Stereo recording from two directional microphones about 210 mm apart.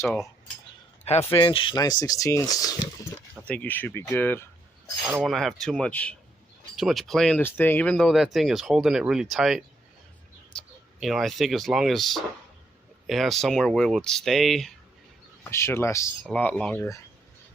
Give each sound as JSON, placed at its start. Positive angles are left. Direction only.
{"t": 0.0, "sound": "speech", "side_deg": 0}
{"t": 1.2, "sound": "speech", "side_deg": 15}
{"t": 3.4, "sound": "speech", "side_deg": 5}
{"t": 5.0, "sound": "speech", "side_deg": 0}
{"t": 15.4, "sound": "speech", "side_deg": 10}